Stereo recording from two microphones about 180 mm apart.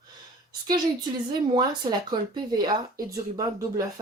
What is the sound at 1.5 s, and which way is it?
Speech, 25° right (ahead or behind).